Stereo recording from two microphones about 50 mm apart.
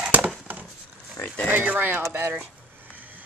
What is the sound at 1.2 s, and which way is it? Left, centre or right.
Speech, left.